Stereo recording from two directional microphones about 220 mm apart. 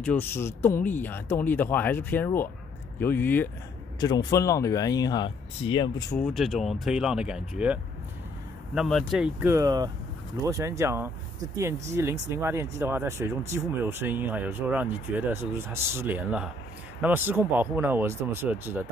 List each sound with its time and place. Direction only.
0.0 s speech: 10° left (ahead or behind)
6.1 s speech: 5° left (ahead or behind)